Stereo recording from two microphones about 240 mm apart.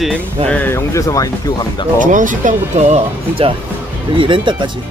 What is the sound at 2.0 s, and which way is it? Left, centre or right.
Speech, right.